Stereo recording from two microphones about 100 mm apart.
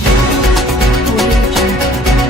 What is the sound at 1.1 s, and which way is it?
Music, centre (ahead or behind).